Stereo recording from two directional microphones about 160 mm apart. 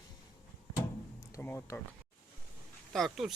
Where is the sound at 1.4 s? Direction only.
10° left (ahead or behind).